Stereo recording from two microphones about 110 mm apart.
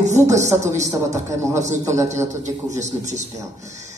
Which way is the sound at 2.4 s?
90° right.